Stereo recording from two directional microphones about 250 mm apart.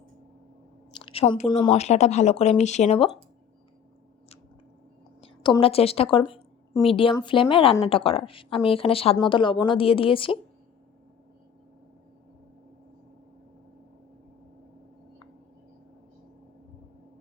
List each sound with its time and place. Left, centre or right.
0.9 s a woman's voice: left
5.2 s a woman's voice: centre